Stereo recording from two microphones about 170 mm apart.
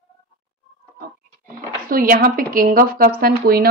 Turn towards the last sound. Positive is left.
turn(degrees=-60)  # may be behind; listen again after turning